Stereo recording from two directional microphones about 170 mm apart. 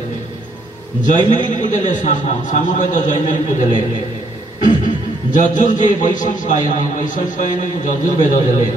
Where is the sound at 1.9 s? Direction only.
50° left (ahead or behind).